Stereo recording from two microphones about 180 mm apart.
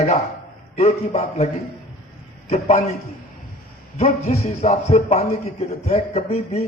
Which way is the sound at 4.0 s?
40° left (ahead or behind).